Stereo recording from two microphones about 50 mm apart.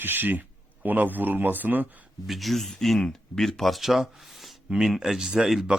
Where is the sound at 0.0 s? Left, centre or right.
Right.